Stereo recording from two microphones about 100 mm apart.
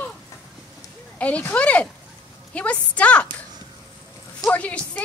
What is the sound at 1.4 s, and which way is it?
Speech, 15° left (ahead or behind).